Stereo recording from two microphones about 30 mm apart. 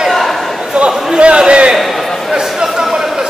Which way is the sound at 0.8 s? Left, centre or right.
Right.